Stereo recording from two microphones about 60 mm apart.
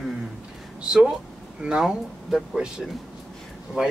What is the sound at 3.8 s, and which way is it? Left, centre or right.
Speech, right.